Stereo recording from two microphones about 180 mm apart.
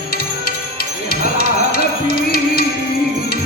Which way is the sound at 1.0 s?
55° left (ahead or behind).